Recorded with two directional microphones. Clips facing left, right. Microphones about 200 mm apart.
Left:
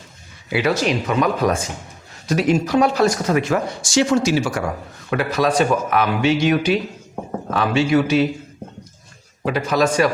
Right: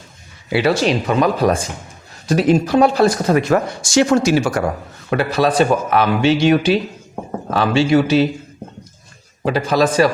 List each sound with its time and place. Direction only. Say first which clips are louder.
0.5 s speech: right 3 dB; 30° right (ahead or behind); by 4.7 s 45° right (ahead or behind)
5.1 s speech: right 3 dB; 30° right (ahead or behind)
9.4 s speech: right 2 dB; 30° right (ahead or behind)